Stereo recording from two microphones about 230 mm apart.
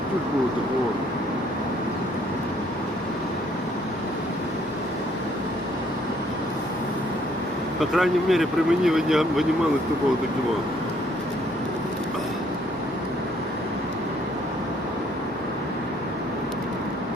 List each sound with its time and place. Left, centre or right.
7.8 s speech: centre